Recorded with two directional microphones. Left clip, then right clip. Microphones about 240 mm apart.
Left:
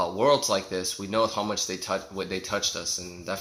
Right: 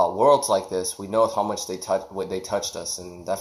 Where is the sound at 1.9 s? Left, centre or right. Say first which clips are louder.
Right 9 dB; centre.